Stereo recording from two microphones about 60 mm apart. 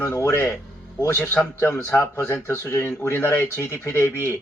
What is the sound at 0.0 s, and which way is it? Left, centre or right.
Speech, left.